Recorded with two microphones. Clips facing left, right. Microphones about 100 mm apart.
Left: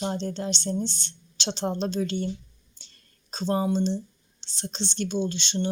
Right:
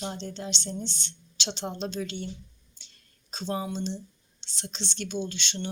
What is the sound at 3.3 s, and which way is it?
Speech, 40° left (ahead or behind).